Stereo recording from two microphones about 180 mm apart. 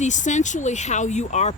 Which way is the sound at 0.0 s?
40° left (ahead or behind).